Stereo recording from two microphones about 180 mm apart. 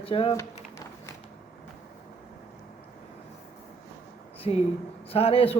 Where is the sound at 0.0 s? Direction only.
30° left (ahead or behind).